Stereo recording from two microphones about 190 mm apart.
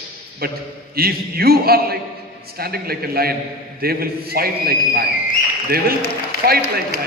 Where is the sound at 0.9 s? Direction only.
55° right (ahead or behind).